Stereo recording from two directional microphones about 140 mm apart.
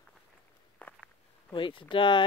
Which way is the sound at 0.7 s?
10° left (ahead or behind).